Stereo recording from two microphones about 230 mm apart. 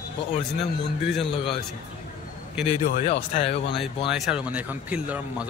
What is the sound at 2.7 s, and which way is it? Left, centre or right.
Speech, left.